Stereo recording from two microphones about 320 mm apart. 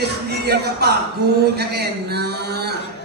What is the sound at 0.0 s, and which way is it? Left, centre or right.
Speech, right.